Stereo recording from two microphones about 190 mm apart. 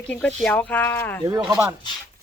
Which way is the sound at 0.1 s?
5° left (ahead or behind).